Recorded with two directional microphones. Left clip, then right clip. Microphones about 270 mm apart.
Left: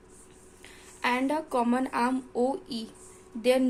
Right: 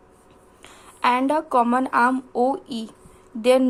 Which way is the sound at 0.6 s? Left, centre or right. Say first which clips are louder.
Right 9 dB; centre.